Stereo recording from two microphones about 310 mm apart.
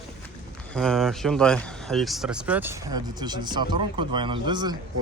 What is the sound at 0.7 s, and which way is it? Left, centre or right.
Speech, centre.